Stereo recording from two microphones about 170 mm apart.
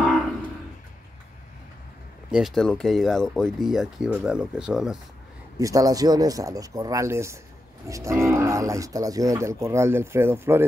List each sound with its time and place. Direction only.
2.3 s speech: centre (ahead or behind)
5.6 s speech: 20° right (ahead or behind)